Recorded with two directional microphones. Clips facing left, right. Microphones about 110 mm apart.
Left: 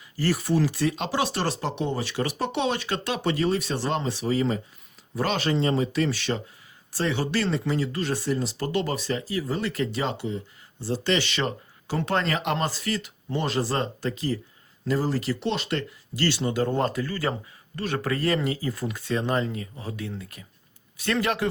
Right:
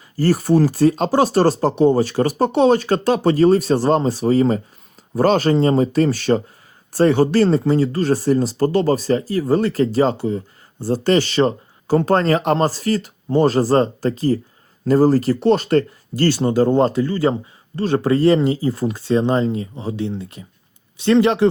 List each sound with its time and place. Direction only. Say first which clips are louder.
0.2 s speech: right 8 dB; 40° right (ahead or behind); by 21.4 s 25° right (ahead or behind)